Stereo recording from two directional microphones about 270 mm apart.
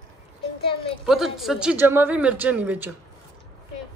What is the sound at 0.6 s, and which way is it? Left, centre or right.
Speech, centre.